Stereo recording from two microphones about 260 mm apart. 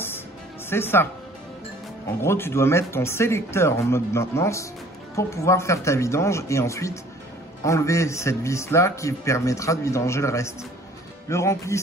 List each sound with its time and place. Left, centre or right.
0.7 s a man's voice: centre
2.2 s a man's voice: centre